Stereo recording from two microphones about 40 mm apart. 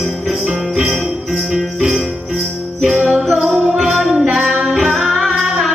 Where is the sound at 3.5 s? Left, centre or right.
Centre.